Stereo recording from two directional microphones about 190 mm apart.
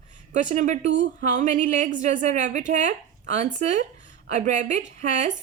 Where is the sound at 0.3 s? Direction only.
40° right (ahead or behind).